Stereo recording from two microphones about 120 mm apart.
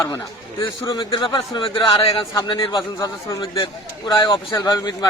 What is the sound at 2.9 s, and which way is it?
A man's voice, 30° left (ahead or behind).